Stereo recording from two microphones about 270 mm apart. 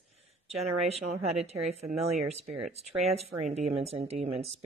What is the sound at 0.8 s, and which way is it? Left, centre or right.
Speech, right.